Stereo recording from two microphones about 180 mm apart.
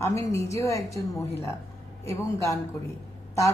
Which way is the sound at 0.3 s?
15° left (ahead or behind).